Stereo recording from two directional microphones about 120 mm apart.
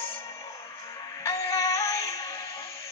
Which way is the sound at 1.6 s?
25° left (ahead or behind).